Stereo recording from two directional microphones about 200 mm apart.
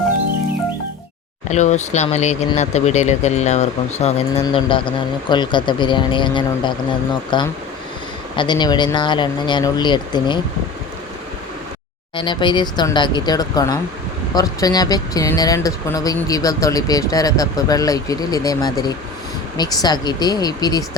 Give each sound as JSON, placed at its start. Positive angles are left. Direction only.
{"t": 1.5, "sound": "speech", "side_deg": 35}
{"t": 12.1, "sound": "speech", "side_deg": 25}